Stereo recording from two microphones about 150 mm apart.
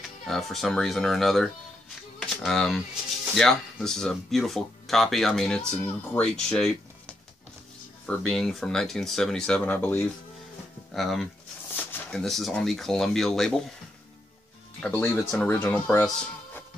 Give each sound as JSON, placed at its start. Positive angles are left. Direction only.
{"t": 0.3, "sound": "speech", "side_deg": 0}
{"t": 8.3, "sound": "speech", "side_deg": 0}
{"t": 10.9, "sound": "speech", "side_deg": 0}
{"t": 14.8, "sound": "speech", "side_deg": 10}